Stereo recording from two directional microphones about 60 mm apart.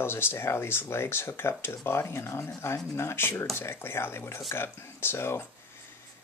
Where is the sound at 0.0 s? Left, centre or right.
Left.